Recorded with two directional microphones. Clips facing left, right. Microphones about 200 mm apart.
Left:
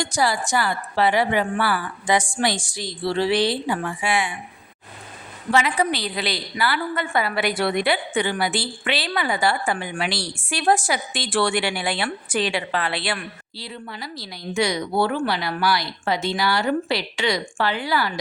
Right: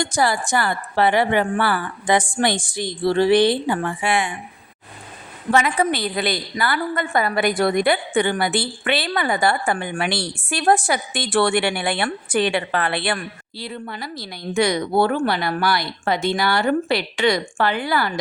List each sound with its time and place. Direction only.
0.0 s a woman's voice: 55° right (ahead or behind)
5.5 s a woman's voice: 50° right (ahead or behind)